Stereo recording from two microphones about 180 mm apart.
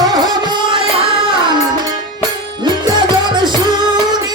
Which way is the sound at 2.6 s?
25° right (ahead or behind).